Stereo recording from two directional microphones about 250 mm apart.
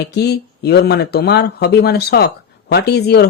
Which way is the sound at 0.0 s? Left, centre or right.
Left.